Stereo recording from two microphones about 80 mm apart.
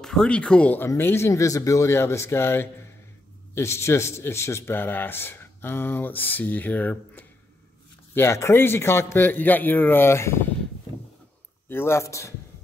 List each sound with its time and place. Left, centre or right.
0.0 s speech: centre
0.7 s speech: left
8.1 s speech: left
11.7 s speech: left